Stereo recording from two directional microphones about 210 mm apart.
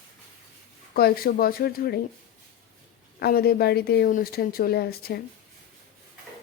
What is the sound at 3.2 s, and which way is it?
Speech, 45° left (ahead or behind).